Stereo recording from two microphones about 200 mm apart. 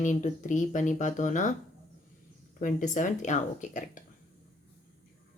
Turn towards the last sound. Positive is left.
turn(degrees=40)  # may be behind; listen again after turning